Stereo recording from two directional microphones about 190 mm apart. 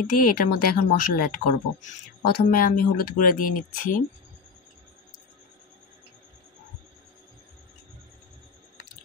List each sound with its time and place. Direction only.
0.2 s speech: 50° left (ahead or behind)